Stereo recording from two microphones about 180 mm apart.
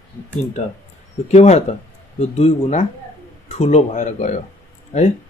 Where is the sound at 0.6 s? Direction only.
40° left (ahead or behind).